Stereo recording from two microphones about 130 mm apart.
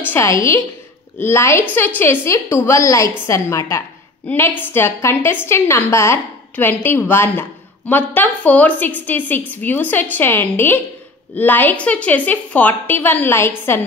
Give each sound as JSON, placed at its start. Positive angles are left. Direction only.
{"t": 0.0, "sound": "a woman's voice", "side_deg": 20}